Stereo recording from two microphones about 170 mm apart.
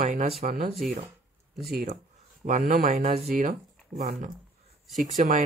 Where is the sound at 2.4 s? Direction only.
50° right (ahead or behind).